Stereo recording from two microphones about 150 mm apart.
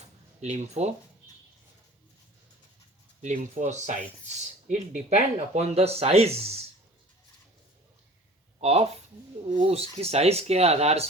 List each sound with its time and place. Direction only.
0.4 s speech: 45° right (ahead or behind)
3.2 s speech: 50° right (ahead or behind)
8.6 s speech: 45° right (ahead or behind)